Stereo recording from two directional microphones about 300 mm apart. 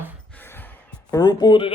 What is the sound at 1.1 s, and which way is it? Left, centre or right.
Speech, centre.